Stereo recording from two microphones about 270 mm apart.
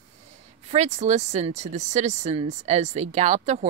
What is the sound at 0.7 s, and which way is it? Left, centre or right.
Speech, right.